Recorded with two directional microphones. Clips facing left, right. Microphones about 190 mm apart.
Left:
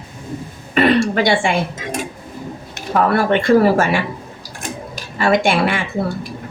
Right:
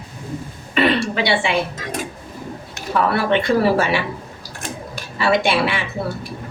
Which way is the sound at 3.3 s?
50° left (ahead or behind).